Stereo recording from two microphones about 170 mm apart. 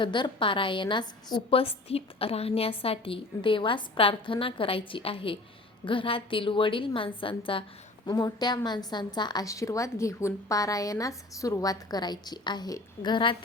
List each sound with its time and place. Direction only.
0.0 s a woman's voice: 30° left (ahead or behind)